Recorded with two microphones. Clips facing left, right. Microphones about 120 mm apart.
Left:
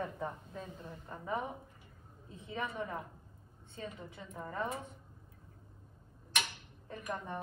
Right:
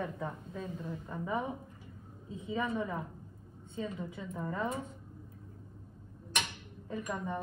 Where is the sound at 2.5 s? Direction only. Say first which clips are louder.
Right 5 dB; 20° right (ahead or behind).